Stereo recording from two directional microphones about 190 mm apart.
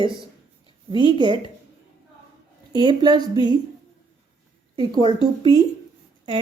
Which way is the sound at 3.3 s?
25° left (ahead or behind).